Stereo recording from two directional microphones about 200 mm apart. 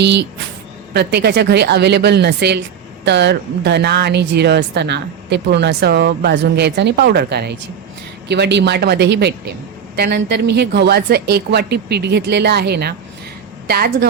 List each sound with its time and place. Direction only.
0.0 s a woman's voice: 60° right (ahead or behind)